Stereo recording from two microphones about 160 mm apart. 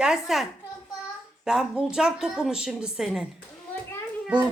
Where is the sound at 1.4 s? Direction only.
5° right (ahead or behind).